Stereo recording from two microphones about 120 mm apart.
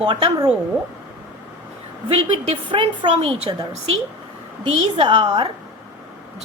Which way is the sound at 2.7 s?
40° right (ahead or behind).